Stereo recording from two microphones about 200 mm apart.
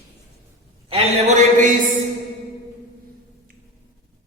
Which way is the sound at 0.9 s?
30° right (ahead or behind).